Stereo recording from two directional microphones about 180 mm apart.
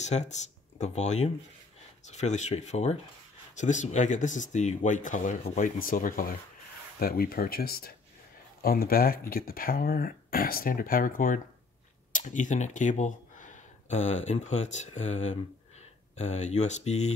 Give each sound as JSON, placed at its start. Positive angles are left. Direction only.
{"t": 0.0, "sound": "speech", "side_deg": 40}